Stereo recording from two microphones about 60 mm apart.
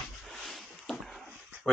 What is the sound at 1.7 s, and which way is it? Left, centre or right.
Speech, centre.